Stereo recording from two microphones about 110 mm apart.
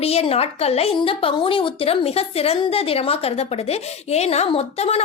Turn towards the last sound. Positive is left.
turn(degrees=65)  # may be behind; listen again after turning